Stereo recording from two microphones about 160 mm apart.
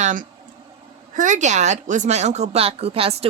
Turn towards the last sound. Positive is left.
turn(degrees=-35)  # may be behind; listen again after turning